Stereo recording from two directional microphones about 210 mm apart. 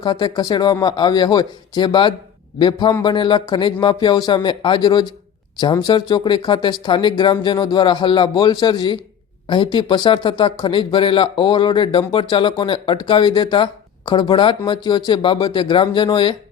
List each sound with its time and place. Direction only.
0.0 s speech: 20° left (ahead or behind)